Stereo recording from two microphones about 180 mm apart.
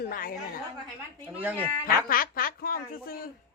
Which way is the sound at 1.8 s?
50° left (ahead or behind).